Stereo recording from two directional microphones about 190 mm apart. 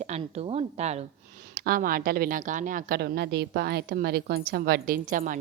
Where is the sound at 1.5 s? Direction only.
55° right (ahead or behind).